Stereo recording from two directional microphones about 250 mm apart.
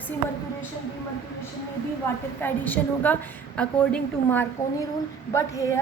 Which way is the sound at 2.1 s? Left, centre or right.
Centre.